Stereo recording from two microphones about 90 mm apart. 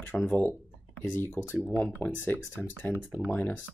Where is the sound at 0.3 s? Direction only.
15° left (ahead or behind).